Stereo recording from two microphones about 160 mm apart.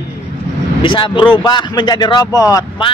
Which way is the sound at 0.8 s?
30° left (ahead or behind).